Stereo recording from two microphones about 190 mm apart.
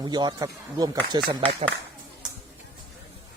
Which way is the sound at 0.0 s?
20° right (ahead or behind).